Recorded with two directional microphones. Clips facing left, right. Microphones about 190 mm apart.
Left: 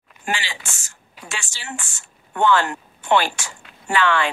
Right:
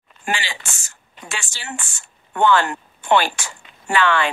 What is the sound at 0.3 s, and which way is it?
Speech, 60° right (ahead or behind).